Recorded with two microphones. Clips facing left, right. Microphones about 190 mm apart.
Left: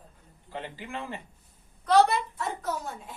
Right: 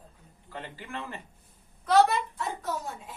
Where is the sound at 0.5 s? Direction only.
20° left (ahead or behind).